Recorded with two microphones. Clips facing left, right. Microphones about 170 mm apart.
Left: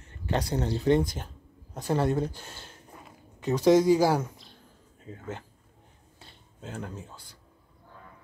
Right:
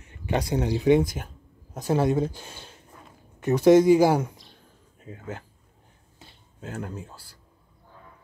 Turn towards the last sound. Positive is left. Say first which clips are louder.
# right 3 dB
turn(degrees=-5)  # may be behind; listen again after turning